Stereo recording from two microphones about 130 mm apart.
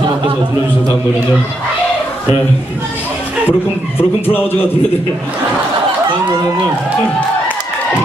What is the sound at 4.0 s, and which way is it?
Speech, 15° left (ahead or behind).